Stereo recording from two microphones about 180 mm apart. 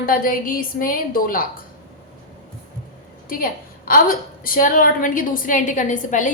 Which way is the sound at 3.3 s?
50° left (ahead or behind).